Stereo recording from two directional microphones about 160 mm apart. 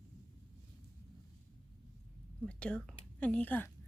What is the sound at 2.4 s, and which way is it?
Speech, 5° left (ahead or behind).